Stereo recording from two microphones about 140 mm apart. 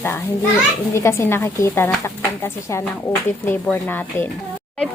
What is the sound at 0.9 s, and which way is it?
A woman's voice, 20° left (ahead or behind).